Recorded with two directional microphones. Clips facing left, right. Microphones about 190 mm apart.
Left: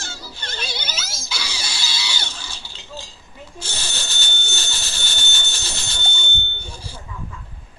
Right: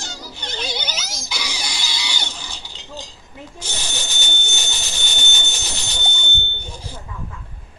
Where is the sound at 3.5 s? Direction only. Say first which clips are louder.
Right 1 dB; 15° right (ahead or behind).